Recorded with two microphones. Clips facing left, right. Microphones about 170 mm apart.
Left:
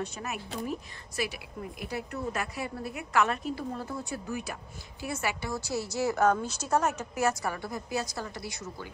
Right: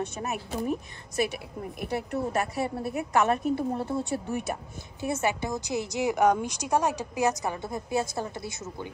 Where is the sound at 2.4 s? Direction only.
25° right (ahead or behind).